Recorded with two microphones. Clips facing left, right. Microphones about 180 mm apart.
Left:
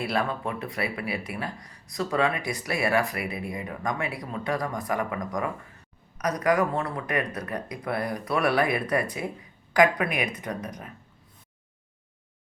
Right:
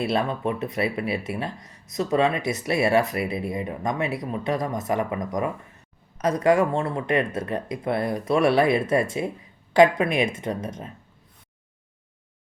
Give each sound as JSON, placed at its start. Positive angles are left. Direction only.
{"t": 0.0, "sound": "speech", "side_deg": -25}